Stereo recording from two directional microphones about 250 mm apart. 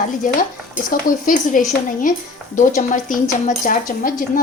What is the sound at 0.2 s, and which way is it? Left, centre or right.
A woman's voice, left.